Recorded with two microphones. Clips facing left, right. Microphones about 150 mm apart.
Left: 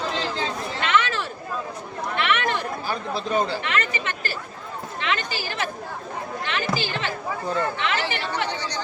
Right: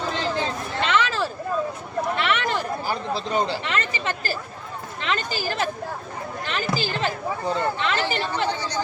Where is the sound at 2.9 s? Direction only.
30° right (ahead or behind).